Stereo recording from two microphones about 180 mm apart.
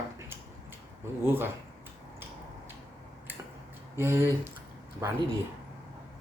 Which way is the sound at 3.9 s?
15° right (ahead or behind).